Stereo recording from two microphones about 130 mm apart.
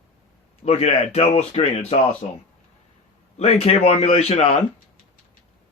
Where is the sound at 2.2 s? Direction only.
60° left (ahead or behind).